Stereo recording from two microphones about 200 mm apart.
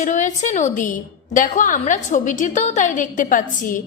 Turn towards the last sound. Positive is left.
turn(degrees=40)  # may be behind; listen again after turning